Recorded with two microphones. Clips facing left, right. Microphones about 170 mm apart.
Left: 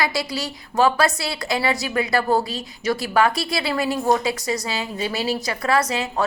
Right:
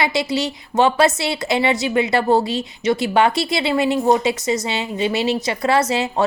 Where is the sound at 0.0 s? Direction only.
25° right (ahead or behind).